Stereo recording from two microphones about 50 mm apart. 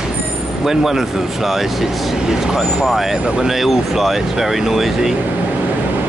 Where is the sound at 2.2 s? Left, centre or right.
Centre.